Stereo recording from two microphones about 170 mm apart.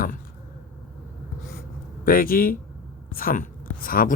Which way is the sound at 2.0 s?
55° left (ahead or behind).